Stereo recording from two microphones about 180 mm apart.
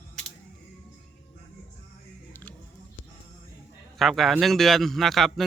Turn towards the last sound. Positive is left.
turn(degrees=0)  # may be behind; listen again after turning